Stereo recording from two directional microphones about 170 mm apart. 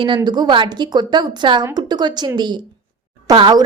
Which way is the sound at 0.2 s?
25° right (ahead or behind).